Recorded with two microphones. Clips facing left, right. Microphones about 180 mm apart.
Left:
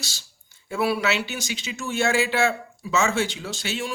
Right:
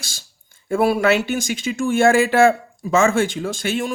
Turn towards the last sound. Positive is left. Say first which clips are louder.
# right 7 dB
turn(degrees=-50)  # may be behind; listen again after turning